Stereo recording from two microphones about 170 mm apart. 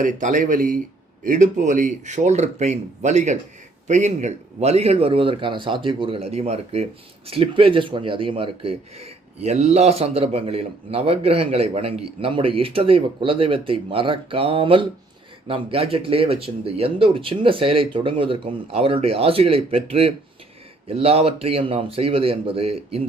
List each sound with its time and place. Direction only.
0.0 s speech: 50° right (ahead or behind)